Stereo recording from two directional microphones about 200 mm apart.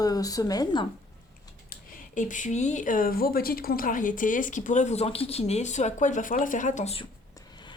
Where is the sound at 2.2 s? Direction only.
40° left (ahead or behind).